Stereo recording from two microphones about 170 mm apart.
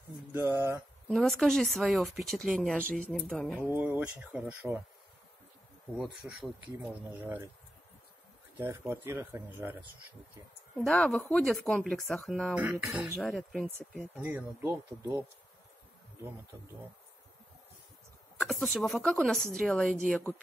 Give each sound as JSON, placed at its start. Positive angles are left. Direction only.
{"t": 0.3, "sound": "speech", "side_deg": -15}
{"t": 1.0, "sound": "speech", "side_deg": 0}
{"t": 2.8, "sound": "speech", "side_deg": -55}
{"t": 3.1, "sound": "speech", "side_deg": 5}
{"t": 5.9, "sound": "speech", "side_deg": 0}
{"t": 8.5, "sound": "speech", "side_deg": -15}
{"t": 10.9, "sound": "speech", "side_deg": 5}
{"t": 12.5, "sound": "speech", "side_deg": -10}
{"t": 18.5, "sound": "speech", "side_deg": 0}